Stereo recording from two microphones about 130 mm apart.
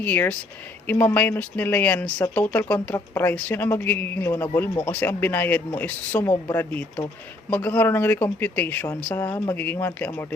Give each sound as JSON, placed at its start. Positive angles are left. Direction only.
{"t": 0.0, "sound": "speech", "side_deg": 10}